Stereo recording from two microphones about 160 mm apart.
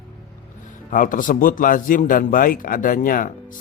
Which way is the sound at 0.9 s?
55° left (ahead or behind).